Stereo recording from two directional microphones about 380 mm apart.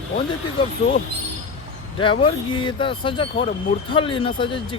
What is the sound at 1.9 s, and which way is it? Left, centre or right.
Speech, centre.